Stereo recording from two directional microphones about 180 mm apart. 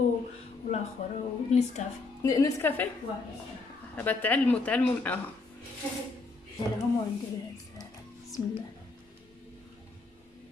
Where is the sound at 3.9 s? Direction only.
10° left (ahead or behind).